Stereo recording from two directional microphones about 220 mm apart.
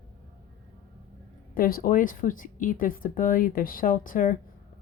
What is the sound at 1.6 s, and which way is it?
A woman's voice, 40° left (ahead or behind).